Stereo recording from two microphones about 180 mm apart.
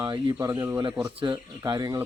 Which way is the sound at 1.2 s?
20° right (ahead or behind).